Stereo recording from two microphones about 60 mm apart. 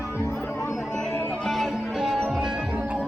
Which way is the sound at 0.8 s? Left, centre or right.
Centre.